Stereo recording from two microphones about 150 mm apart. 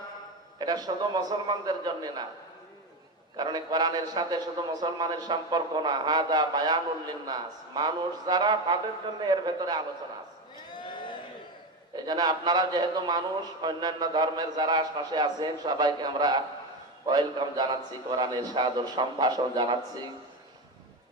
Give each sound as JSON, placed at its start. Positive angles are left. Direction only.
{"t": 0.6, "sound": "a man's voice", "side_deg": -25}
{"t": 3.3, "sound": "a man's voice", "side_deg": -25}
{"t": 10.8, "sound": "a sound", "side_deg": 30}
{"t": 11.9, "sound": "a man's voice", "side_deg": -25}